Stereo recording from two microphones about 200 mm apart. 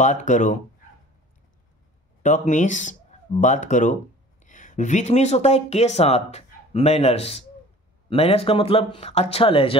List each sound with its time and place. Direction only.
0.0 s speech: 40° left (ahead or behind)
2.2 s speech: 40° left (ahead or behind)